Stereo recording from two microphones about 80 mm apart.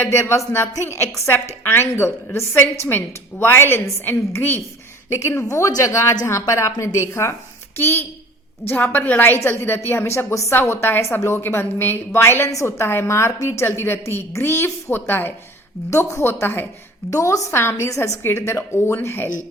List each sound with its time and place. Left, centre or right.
0.1 s a woman's voice: left
17.1 s a woman's voice: left